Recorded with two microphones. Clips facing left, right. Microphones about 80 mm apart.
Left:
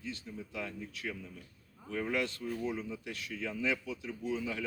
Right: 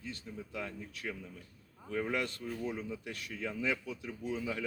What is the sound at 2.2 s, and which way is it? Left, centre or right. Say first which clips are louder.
Speech: left 2 dB; right.